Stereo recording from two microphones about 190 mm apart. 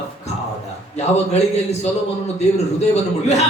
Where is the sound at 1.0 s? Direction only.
35° left (ahead or behind).